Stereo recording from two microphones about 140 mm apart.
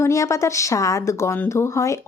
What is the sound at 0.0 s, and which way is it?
A woman's voice, 20° left (ahead or behind).